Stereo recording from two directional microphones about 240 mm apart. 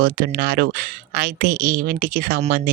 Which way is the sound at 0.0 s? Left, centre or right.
Right.